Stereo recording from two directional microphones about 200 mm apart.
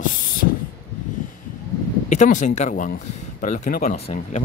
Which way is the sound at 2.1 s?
35° left (ahead or behind).